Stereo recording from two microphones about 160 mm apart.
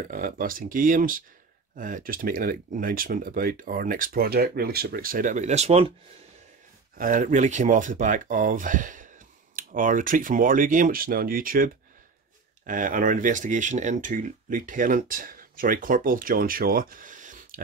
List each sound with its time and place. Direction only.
0.1 s speech: 60° right (ahead or behind); by 5.9 s 40° right (ahead or behind)
7.0 s speech: 55° right (ahead or behind)